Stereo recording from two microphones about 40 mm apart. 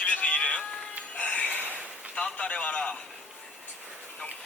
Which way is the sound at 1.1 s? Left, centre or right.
Left.